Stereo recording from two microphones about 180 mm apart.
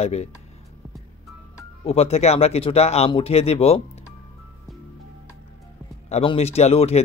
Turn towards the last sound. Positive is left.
turn(degrees=35)  # may be behind; listen again after turning